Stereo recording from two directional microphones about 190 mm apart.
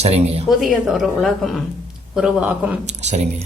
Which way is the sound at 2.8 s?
35° right (ahead or behind).